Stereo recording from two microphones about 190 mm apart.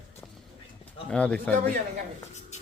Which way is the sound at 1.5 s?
50° right (ahead or behind).